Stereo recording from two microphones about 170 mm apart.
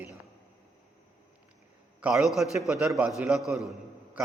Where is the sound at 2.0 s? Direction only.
Centre (ahead or behind).